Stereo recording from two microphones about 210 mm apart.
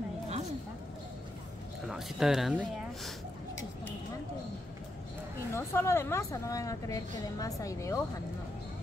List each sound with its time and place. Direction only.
1.9 s speech: centre (ahead or behind)
5.5 s a woman's voice: 10° left (ahead or behind)